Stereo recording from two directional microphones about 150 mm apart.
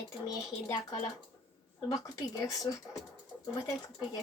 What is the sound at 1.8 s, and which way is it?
Speech, 20° left (ahead or behind).